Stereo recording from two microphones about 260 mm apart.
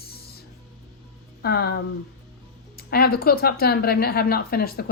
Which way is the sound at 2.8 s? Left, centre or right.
Left.